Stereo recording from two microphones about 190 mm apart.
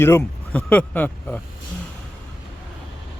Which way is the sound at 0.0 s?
10° left (ahead or behind).